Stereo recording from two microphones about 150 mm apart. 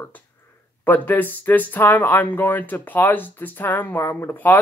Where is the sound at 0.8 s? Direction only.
10° left (ahead or behind).